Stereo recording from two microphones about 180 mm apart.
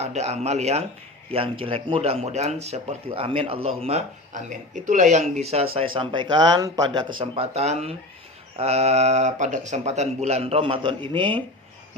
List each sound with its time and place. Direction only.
0.0 s speech: 40° right (ahead or behind)
7.2 s speech: 35° right (ahead or behind)